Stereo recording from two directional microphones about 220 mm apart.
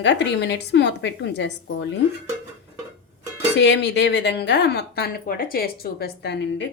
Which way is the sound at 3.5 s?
50° left (ahead or behind).